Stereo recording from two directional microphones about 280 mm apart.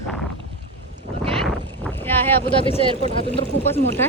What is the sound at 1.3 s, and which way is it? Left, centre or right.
Boat, centre.